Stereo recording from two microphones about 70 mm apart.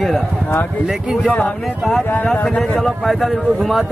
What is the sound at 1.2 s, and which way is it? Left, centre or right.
Speech, centre.